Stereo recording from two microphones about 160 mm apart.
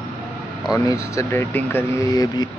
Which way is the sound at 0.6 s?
20° left (ahead or behind).